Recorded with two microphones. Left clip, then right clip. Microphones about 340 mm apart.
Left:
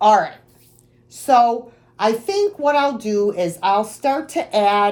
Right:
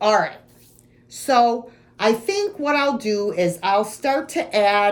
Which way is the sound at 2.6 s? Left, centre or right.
Left.